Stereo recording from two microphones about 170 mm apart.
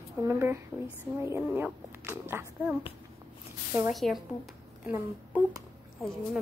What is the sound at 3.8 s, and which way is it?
Speech, centre (ahead or behind).